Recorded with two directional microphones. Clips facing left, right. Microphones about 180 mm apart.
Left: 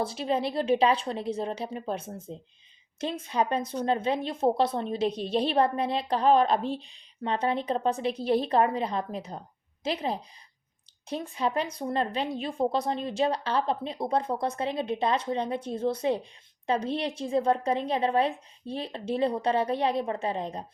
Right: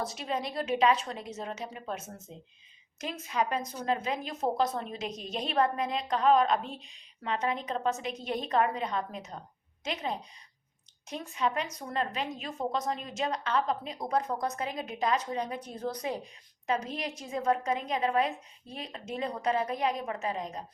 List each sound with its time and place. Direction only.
0.0 s a woman's voice: 30° left (ahead or behind)